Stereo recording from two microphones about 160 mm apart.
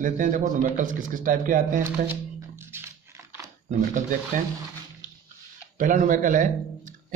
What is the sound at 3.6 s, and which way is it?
Speech, 50° right (ahead or behind).